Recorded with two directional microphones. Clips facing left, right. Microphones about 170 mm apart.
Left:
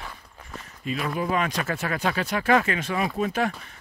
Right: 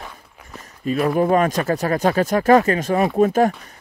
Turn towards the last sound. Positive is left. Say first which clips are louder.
# right 9 dB
turn(degrees=-45)  # may be behind; listen again after turning